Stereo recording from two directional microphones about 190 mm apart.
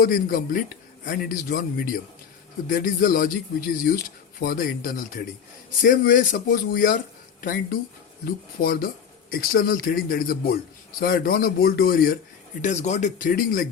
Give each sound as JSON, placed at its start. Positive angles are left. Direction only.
{"t": 0.0, "sound": "speech", "side_deg": 50}
{"t": 12.6, "sound": "speech", "side_deg": 40}